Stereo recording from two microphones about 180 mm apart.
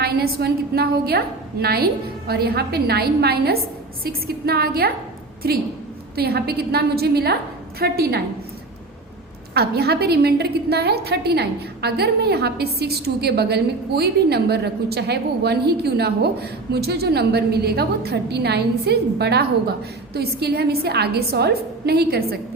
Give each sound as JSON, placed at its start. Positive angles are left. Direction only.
{"t": 0.0, "sound": "a woman's voice", "side_deg": -60}
{"t": 9.6, "sound": "a woman's voice", "side_deg": -60}